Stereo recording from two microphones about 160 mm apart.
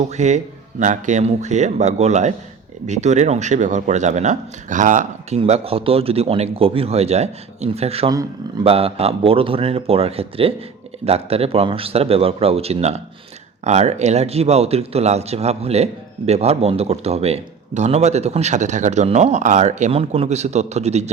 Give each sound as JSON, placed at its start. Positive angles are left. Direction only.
{"t": 0.0, "sound": "a man's voice", "side_deg": -45}
{"t": 5.4, "sound": "speech", "side_deg": -40}
{"t": 8.1, "sound": "speech", "side_deg": -20}
{"t": 8.6, "sound": "a man's voice", "side_deg": -35}